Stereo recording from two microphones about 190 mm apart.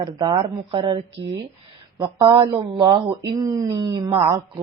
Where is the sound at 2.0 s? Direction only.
20° right (ahead or behind).